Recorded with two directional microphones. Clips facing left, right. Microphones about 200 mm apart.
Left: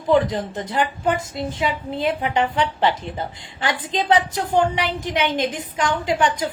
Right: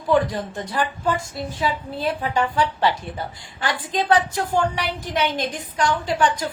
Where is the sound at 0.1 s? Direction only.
20° left (ahead or behind).